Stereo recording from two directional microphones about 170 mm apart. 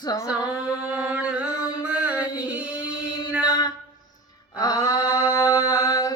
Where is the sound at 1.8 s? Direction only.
10° right (ahead or behind).